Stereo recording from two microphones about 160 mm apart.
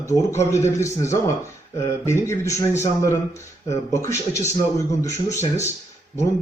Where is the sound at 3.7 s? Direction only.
20° left (ahead or behind).